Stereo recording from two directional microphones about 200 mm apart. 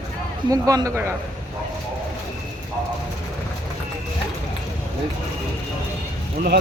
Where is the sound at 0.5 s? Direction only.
15° right (ahead or behind).